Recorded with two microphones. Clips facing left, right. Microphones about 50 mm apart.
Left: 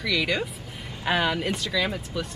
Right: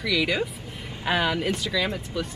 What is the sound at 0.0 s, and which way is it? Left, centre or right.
Speech, centre.